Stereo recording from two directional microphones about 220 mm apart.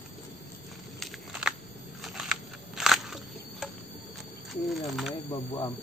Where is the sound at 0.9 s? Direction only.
Centre (ahead or behind).